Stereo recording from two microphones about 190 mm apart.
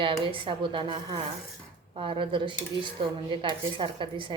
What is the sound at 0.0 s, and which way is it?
Speech, 25° right (ahead or behind).